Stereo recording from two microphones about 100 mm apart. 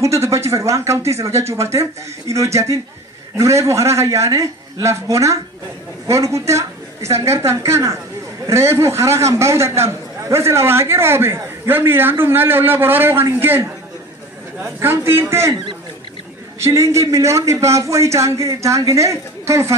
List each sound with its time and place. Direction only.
0.0 s a man's voice: 30° right (ahead or behind)
16.5 s a man's voice: 30° right (ahead or behind)